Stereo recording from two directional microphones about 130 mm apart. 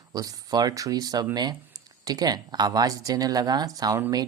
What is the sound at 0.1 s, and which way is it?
Speech, 30° right (ahead or behind).